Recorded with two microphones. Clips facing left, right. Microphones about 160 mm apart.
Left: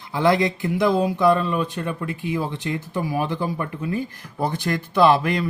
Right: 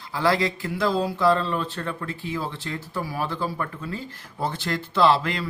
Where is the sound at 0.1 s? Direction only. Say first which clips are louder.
Left 4 dB; 20° left (ahead or behind).